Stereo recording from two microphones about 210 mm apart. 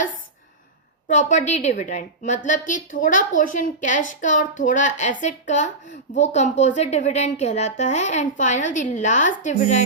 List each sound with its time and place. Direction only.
1.0 s a woman's voice: 35° left (ahead or behind)